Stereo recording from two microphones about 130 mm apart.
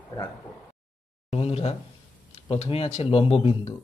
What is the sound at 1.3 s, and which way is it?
Speech, 50° left (ahead or behind).